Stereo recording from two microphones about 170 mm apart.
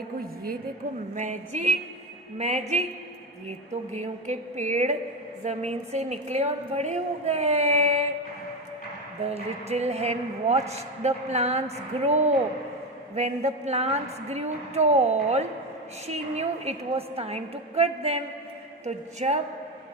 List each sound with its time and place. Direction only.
1.1 s a woman's voice: 45° right (ahead or behind)
3.9 s a woman's voice: 40° right (ahead or behind)
9.2 s a woman's voice: 40° right (ahead or behind)